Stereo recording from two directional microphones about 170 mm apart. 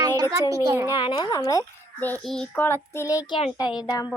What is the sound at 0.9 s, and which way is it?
A child's voice, 25° left (ahead or behind).